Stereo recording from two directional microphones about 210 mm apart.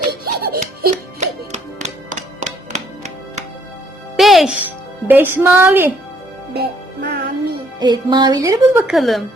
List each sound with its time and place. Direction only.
0.1 s laughter: 45° right (ahead or behind)
0.6 s music: 35° right (ahead or behind)
4.2 s music: centre (ahead or behind)
5.0 s a woman's voice: 10° right (ahead or behind)
6.5 s music: 50° right (ahead or behind)
7.8 s speech: 20° right (ahead or behind)
8.8 s a woman's voice: centre (ahead or behind)